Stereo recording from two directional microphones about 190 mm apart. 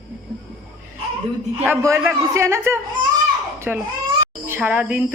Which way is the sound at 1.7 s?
15° right (ahead or behind).